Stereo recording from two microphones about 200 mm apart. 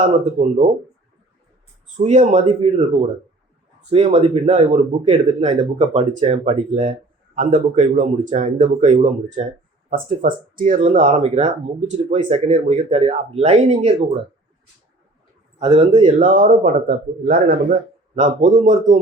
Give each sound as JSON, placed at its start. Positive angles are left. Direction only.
{"t": 0.0, "sound": "speech", "side_deg": -35}
{"t": 2.0, "sound": "speech", "side_deg": -35}
{"t": 15.5, "sound": "speech", "side_deg": -30}
{"t": 16.1, "sound": "speech", "side_deg": -40}